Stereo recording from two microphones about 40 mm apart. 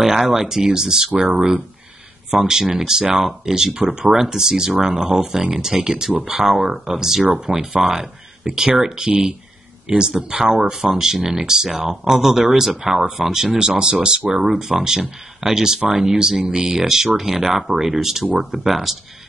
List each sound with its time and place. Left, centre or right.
0.0 s speech: centre
2.3 s speech: centre